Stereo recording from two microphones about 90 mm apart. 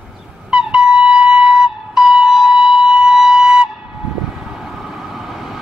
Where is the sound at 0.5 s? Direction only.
10° right (ahead or behind).